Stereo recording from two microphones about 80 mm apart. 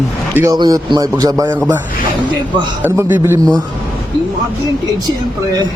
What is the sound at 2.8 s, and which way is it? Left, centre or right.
Mantra, right.